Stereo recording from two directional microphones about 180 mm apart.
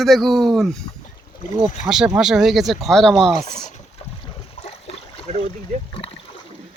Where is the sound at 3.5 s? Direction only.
40° left (ahead or behind).